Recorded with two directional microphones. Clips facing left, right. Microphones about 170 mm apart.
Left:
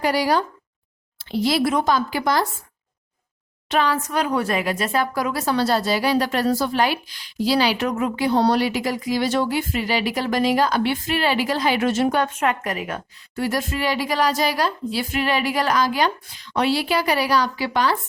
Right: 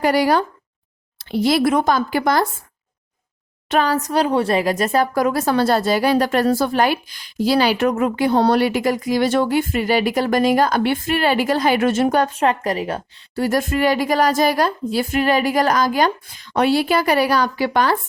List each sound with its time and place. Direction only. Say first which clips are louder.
0.0 s speech: right 4 dB; 55° right (ahead or behind)
3.7 s speech: right 3 dB; 40° right (ahead or behind)
13.5 s speech: right 7 dB; 50° right (ahead or behind)